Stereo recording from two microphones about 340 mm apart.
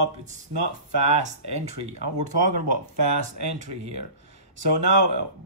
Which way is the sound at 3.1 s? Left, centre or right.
Right.